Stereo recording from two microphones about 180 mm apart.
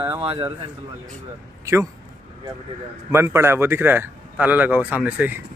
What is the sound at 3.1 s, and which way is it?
Speech, 15° right (ahead or behind).